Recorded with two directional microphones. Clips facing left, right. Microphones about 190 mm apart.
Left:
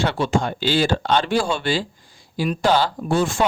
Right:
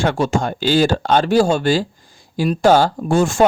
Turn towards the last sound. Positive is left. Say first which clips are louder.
# right 5 dB
turn(degrees=-45)  # may be behind; listen again after turning